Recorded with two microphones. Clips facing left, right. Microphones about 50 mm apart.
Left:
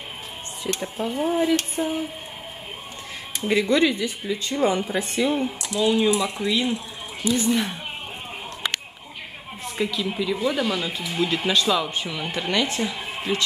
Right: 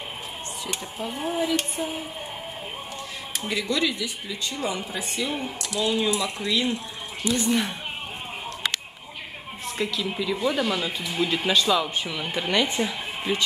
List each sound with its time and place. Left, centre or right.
0.9 s speech: centre
3.4 s speech: left
4.6 s a woman's voice: left
5.3 s speech: centre
9.7 s speech: centre